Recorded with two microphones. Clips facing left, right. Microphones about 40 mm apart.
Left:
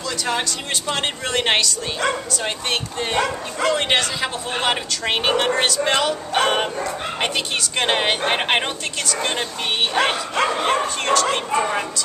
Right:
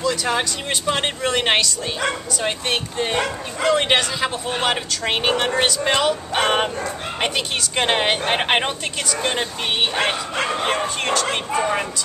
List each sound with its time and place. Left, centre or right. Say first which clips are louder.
0.0 s speech: right 3 dB; centre